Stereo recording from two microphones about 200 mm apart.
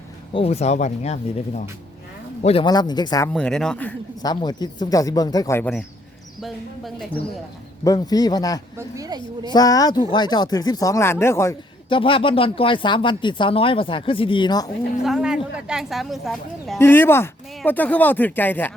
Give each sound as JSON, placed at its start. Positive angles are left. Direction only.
{"t": 0.3, "sound": "speech", "side_deg": 30}
{"t": 3.3, "sound": "speech", "side_deg": 5}
{"t": 4.2, "sound": "speech", "side_deg": 20}
{"t": 7.9, "sound": "speech", "side_deg": 20}
{"t": 8.8, "sound": "a woman's voice", "side_deg": -20}
{"t": 9.5, "sound": "speech", "side_deg": 20}
{"t": 11.9, "sound": "speech", "side_deg": 25}
{"t": 15.0, "sound": "speech", "side_deg": -5}
{"t": 16.7, "sound": "speech", "side_deg": 10}